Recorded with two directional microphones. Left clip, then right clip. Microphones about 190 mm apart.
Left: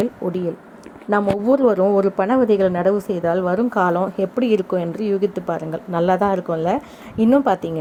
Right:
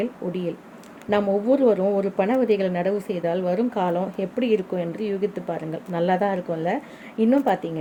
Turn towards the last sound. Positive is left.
turn(degrees=30)  # may be behind; listen again after turning